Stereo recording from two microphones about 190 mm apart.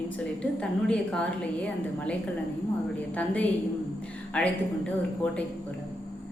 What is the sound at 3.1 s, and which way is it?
Speech, 5° left (ahead or behind).